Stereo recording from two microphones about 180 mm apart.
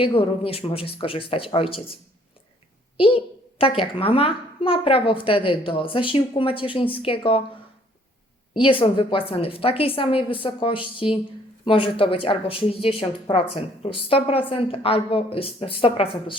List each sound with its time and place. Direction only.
0.0 s speech: 30° left (ahead or behind)
3.0 s a woman's voice: 30° left (ahead or behind)
8.5 s a woman's voice: 30° left (ahead or behind)